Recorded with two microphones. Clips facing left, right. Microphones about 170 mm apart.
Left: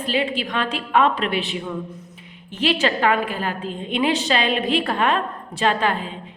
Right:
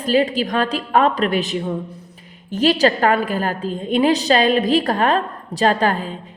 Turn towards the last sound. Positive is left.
turn(degrees=-40)  # may be behind; listen again after turning